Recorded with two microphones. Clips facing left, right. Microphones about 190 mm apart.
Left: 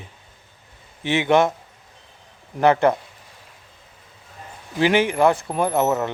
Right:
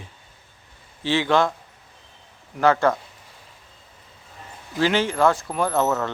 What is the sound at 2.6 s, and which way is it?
Speech, 20° left (ahead or behind).